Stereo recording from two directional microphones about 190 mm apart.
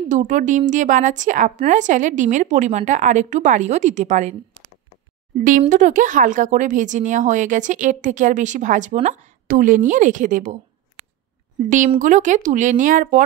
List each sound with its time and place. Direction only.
0.1 s a woman's voice: 40° right (ahead or behind)
5.6 s a woman's voice: 40° right (ahead or behind)
11.9 s a woman's voice: 40° right (ahead or behind)